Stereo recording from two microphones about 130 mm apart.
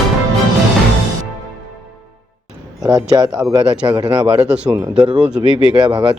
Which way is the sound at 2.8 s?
25° right (ahead or behind).